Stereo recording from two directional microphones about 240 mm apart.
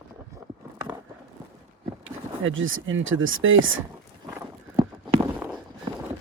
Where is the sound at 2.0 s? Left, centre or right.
Right.